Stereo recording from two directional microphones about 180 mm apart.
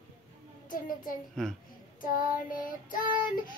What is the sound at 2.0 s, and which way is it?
Child singing, 50° left (ahead or behind).